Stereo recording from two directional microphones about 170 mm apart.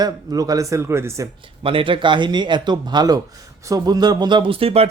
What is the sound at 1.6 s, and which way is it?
Speech, 30° right (ahead or behind).